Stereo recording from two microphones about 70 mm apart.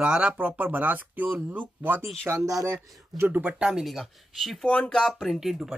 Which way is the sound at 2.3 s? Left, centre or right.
Right.